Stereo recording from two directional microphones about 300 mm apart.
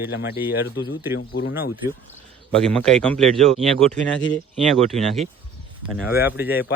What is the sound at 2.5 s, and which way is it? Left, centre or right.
Speech, centre.